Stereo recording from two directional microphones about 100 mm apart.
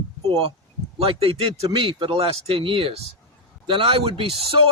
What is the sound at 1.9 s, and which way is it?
Speech, 70° right (ahead or behind).